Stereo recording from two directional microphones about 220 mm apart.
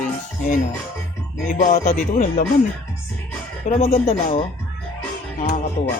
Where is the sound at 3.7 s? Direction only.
25° left (ahead or behind).